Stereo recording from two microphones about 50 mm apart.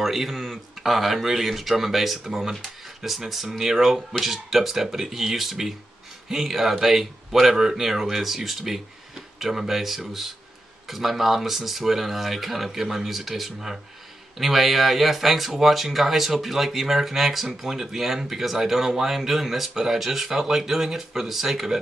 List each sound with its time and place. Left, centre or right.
0.0 s speech: centre